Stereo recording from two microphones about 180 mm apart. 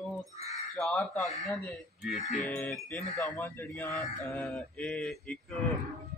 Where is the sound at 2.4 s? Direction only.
5° left (ahead or behind).